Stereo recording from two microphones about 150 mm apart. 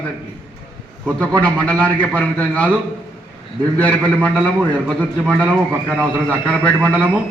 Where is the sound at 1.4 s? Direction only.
5° left (ahead or behind).